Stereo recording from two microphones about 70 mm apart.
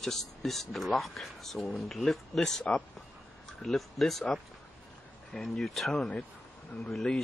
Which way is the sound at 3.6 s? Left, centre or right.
Centre.